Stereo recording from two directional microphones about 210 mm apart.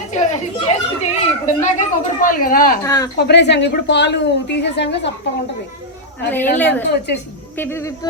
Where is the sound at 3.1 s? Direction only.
55° left (ahead or behind).